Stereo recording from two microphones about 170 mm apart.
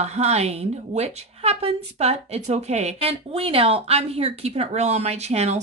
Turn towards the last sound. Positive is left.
turn(degrees=-40)  # may be behind; listen again after turning